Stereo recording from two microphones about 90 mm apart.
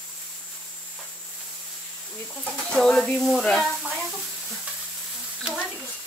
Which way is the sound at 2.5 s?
5° left (ahead or behind).